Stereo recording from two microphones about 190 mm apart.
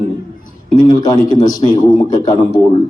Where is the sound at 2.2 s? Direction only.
20° left (ahead or behind).